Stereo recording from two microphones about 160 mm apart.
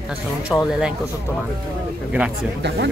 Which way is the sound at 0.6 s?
5° right (ahead or behind).